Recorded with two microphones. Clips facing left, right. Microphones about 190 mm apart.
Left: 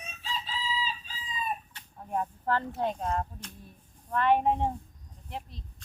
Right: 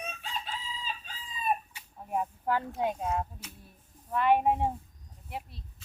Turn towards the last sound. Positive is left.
turn(degrees=-10)  # may be behind; listen again after turning